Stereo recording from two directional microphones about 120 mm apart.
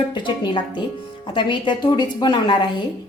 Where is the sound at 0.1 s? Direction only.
40° left (ahead or behind).